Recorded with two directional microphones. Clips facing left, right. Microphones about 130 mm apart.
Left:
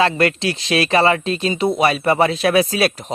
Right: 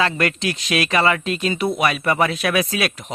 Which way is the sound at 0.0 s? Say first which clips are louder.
Left 4 dB; 30° left (ahead or behind).